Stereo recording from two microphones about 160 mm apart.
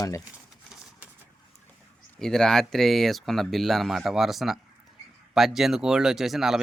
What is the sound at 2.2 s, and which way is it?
Speech, 5° left (ahead or behind).